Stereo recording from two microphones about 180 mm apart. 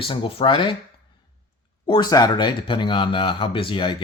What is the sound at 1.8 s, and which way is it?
Speech, 25° left (ahead or behind).